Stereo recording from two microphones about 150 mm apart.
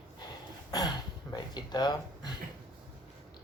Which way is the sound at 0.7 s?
30° left (ahead or behind).